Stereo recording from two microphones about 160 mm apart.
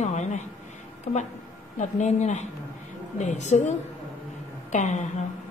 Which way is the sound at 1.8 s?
45° left (ahead or behind).